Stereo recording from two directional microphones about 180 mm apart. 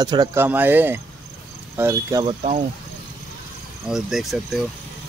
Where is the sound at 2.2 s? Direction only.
35° right (ahead or behind).